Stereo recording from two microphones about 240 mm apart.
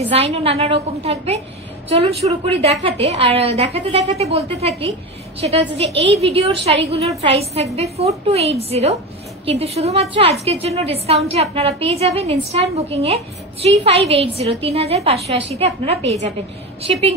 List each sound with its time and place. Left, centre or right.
0.1 s a woman's voice: right